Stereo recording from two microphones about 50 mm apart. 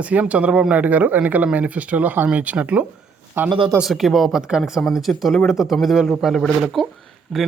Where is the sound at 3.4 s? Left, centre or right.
Right.